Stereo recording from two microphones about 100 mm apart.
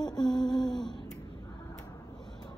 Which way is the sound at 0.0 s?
45° left (ahead or behind).